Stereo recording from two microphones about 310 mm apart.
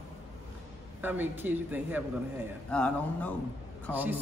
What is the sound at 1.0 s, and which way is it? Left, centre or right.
Speech, centre.